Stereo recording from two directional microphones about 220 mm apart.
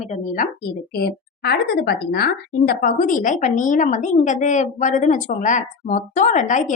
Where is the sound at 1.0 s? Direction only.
45° left (ahead or behind).